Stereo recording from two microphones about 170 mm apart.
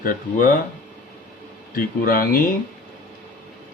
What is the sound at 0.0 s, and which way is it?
Speech, 55° left (ahead or behind).